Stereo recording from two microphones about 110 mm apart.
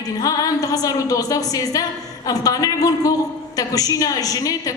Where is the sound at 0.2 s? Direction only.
35° left (ahead or behind).